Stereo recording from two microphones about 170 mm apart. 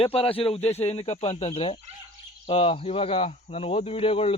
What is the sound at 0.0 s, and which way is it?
Speech, 35° left (ahead or behind).